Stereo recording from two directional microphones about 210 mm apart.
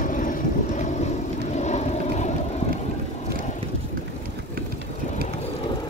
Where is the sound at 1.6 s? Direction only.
35° left (ahead or behind).